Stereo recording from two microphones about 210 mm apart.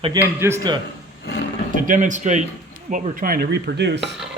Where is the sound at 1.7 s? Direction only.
40° right (ahead or behind); by 4.1 s 55° right (ahead or behind).